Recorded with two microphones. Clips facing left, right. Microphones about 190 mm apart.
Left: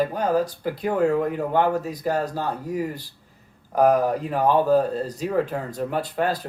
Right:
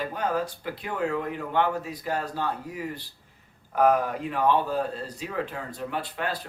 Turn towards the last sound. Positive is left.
turn(degrees=40)  # may be behind; listen again after turning